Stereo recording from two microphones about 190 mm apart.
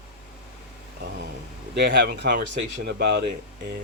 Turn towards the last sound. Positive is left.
turn(degrees=-60)  # may be behind; listen again after turning